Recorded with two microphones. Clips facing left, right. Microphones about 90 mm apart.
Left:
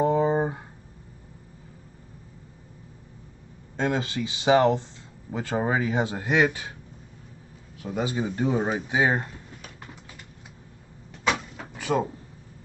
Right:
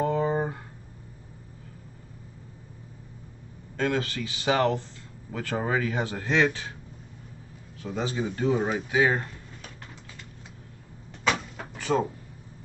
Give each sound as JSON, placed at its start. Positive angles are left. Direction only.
{"t": 0.0, "sound": "a sound", "side_deg": 20}
{"t": 3.7, "sound": "a man's voice", "side_deg": 20}
{"t": 7.8, "sound": "a man's voice", "side_deg": 10}
{"t": 8.8, "sound": "speech", "side_deg": 20}
{"t": 11.2, "sound": "door", "side_deg": 0}
{"t": 11.7, "sound": "a sound", "side_deg": 15}